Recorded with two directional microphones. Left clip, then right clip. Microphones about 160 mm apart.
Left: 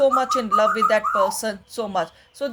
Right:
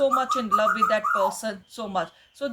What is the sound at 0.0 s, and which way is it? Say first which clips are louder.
Speech: left 4 dB; 40° left (ahead or behind).